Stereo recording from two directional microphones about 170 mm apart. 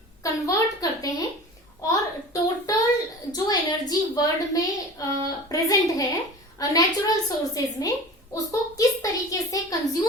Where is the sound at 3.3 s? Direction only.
25° left (ahead or behind).